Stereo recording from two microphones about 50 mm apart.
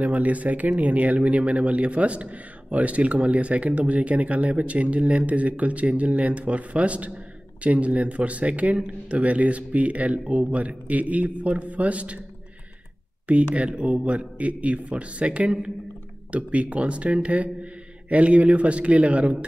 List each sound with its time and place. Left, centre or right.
0.0 s speech: right
13.3 s speech: right